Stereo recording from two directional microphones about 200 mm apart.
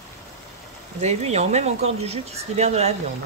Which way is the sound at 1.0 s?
35° right (ahead or behind).